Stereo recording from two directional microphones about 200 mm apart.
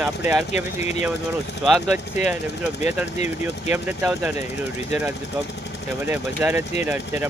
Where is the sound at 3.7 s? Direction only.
10° right (ahead or behind).